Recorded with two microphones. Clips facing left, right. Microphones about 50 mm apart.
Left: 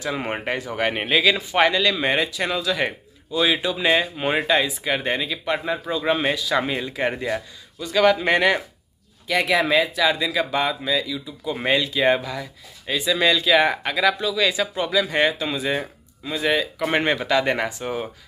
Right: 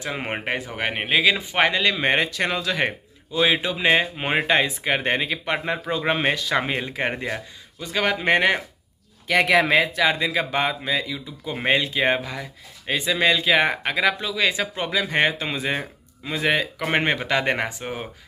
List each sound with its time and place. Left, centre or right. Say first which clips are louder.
0.0 s speech: left 2 dB; right
1.4 s speech: left 2 dB; right
2.1 s speech: even; right
3.3 s speech: even; right
9.3 s speech: right 2 dB; right
16.8 s speech: left 2 dB; right